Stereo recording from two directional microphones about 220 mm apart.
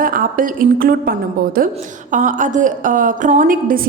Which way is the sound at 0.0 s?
40° right (ahead or behind).